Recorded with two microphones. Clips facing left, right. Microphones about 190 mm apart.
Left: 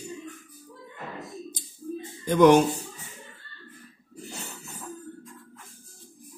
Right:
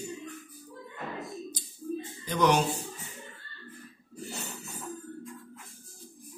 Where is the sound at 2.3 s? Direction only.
50° left (ahead or behind).